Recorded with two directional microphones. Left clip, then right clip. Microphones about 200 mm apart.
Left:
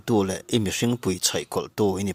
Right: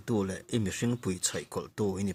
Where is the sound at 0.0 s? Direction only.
40° left (ahead or behind).